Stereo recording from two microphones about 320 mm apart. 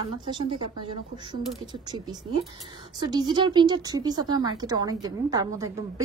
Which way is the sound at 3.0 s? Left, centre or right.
Centre.